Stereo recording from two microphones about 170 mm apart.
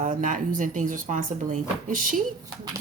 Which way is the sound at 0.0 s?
50° right (ahead or behind).